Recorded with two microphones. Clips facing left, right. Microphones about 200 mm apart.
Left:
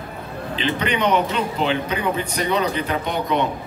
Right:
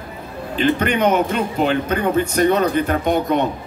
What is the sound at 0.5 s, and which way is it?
A man's voice, 50° right (ahead or behind).